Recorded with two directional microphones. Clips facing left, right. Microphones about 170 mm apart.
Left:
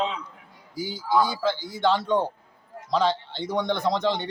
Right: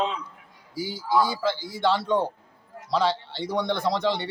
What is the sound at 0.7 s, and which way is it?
A man's voice, 15° left (ahead or behind).